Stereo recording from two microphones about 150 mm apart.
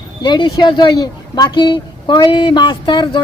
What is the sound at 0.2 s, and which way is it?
Speech, 30° left (ahead or behind).